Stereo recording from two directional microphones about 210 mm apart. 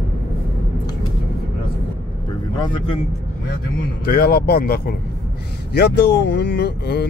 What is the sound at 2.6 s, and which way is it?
Speech, 25° left (ahead or behind).